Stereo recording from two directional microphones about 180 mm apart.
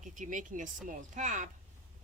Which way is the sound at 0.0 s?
45° right (ahead or behind).